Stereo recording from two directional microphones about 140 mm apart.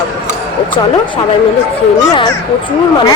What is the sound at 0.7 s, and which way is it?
A child's voice, 35° left (ahead or behind).